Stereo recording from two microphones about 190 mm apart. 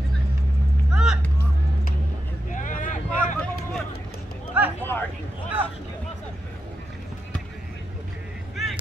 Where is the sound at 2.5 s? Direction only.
45° left (ahead or behind).